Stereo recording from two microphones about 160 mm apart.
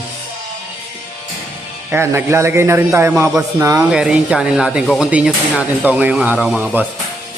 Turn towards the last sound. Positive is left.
turn(degrees=-10)  # may be behind; listen again after turning